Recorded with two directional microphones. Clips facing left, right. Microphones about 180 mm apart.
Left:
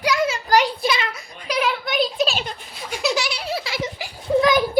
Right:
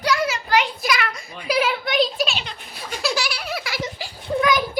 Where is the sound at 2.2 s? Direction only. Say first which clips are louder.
Left 4 dB; 45° left (ahead or behind).